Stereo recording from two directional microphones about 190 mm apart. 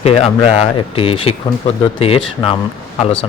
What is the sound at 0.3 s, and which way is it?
Speech, 25° left (ahead or behind).